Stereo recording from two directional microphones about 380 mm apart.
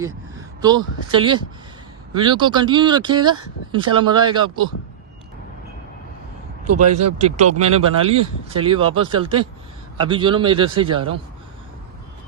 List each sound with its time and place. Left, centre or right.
0.0 s speech: centre
6.7 s speech: right
7.3 s speech: centre